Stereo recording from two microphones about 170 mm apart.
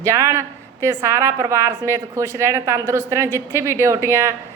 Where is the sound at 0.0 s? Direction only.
20° right (ahead or behind).